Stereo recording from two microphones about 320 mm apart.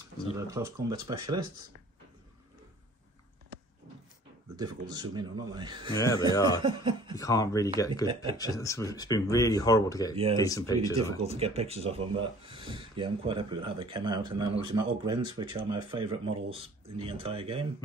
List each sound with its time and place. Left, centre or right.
0.4 s speech: centre
4.6 s speech: centre
5.9 s speech: centre
6.6 s speech: centre
7.2 s speech: centre
11.2 s speech: centre